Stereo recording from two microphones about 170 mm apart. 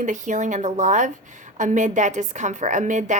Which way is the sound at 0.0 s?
45° right (ahead or behind).